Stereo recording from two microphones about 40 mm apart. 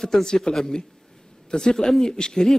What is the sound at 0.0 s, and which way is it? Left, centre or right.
A man's voice, centre.